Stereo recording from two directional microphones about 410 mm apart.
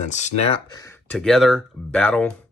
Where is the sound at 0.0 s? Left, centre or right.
Centre.